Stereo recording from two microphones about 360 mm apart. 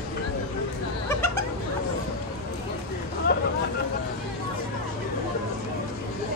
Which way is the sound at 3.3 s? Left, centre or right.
Left.